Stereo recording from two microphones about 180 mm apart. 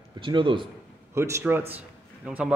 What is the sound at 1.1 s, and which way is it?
A man's voice, 15° right (ahead or behind).